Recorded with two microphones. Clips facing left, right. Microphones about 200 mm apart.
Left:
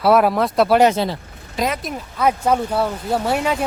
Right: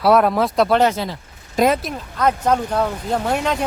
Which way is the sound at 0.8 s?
25° left (ahead or behind).